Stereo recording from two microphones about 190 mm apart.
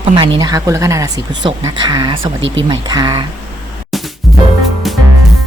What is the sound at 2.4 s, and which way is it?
Speech, 80° right.